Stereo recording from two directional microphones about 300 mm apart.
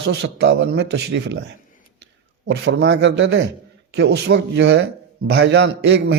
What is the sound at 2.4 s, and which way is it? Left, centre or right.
A man's voice, right.